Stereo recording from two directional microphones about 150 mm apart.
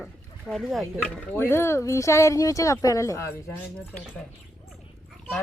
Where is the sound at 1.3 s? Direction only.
15° left (ahead or behind).